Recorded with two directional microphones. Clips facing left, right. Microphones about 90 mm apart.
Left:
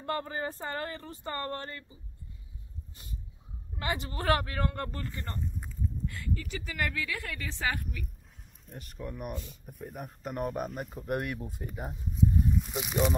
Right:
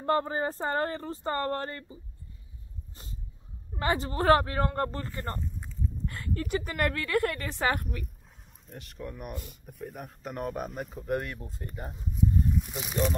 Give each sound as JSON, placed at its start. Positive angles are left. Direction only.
{"t": 0.0, "sound": "speech", "side_deg": -30}
{"t": 2.9, "sound": "a sound", "side_deg": -30}
{"t": 3.7, "sound": "speech", "side_deg": -35}
{"t": 6.0, "sound": "a woman's voice", "side_deg": -50}
{"t": 8.9, "sound": "speech", "side_deg": 5}